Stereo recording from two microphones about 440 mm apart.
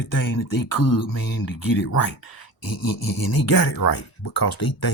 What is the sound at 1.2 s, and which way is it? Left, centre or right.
Speech, left.